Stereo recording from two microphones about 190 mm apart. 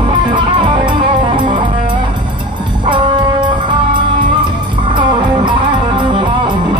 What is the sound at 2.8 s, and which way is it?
Music, 25° right (ahead or behind).